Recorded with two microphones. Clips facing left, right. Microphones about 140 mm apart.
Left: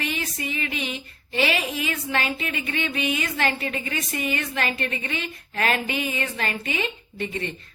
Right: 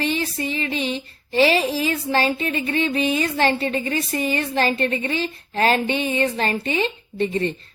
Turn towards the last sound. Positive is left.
turn(degrees=-35)  # may be behind; listen again after turning